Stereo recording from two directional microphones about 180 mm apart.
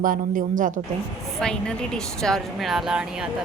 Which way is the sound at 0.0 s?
50° right (ahead or behind).